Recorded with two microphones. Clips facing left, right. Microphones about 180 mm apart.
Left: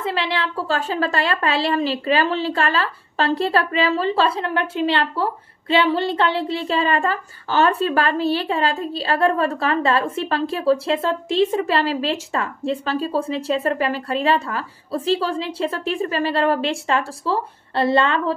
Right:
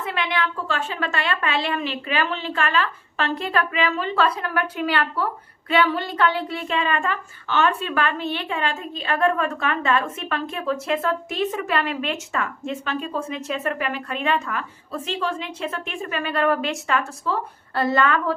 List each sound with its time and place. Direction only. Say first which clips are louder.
0.0 s a woman's voice: left 2 dB; 30° left (ahead or behind)